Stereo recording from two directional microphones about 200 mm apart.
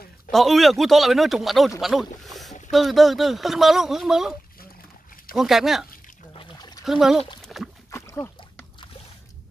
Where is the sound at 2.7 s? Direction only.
Centre (ahead or behind).